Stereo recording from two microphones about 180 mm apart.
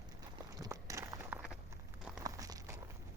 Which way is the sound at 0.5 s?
20° right (ahead or behind).